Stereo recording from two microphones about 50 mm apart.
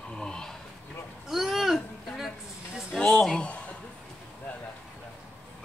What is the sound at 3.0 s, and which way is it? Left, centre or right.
Speech, centre.